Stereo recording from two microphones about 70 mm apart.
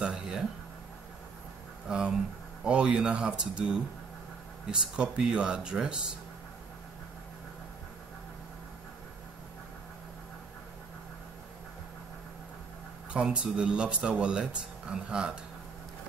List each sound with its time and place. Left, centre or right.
0.0 s a sound: centre
1.9 s speech: centre
13.1 s speech: centre